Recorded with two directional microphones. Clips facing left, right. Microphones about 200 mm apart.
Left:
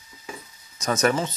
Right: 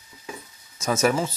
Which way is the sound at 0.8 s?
5° right (ahead or behind).